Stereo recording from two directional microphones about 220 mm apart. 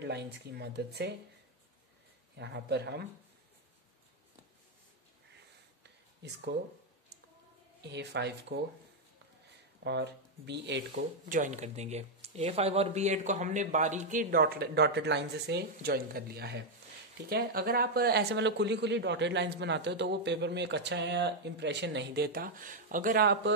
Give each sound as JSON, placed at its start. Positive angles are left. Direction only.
{"t": 0.0, "sound": "speech", "side_deg": -50}
{"t": 2.3, "sound": "speech", "side_deg": -50}
{"t": 7.8, "sound": "speech", "side_deg": -50}
{"t": 9.8, "sound": "speech", "side_deg": -50}
{"t": 11.2, "sound": "speech", "side_deg": -35}